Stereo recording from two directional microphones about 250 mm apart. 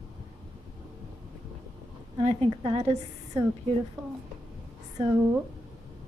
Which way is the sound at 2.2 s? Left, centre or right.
Right.